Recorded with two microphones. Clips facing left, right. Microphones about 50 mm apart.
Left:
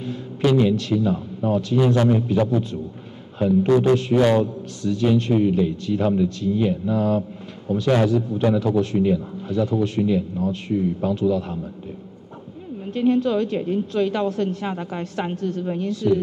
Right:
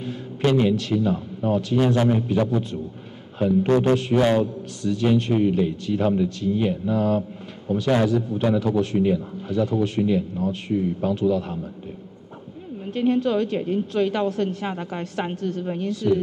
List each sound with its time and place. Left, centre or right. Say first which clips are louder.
0.7 s a man's voice: left 1 dB; centre
3.6 s a man's voice: left 3 dB; right
4.4 s a man's voice: left 1 dB; centre
6.9 s a woman's voice: left 1 dB; centre
12.9 s a woman's voice: left 1 dB; centre